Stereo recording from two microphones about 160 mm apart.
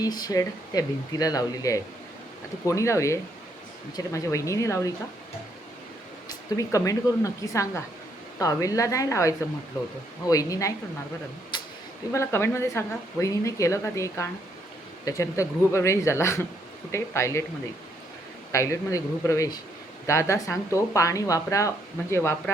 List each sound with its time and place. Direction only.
0.0 s speech: 25° left (ahead or behind)
6.2 s speech: 20° left (ahead or behind)
11.5 s a sound: 30° left (ahead or behind)
12.1 s speech: 15° left (ahead or behind)
18.5 s speech: 20° left (ahead or behind)